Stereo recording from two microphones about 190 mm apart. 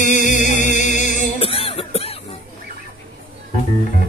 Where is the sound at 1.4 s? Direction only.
30° left (ahead or behind).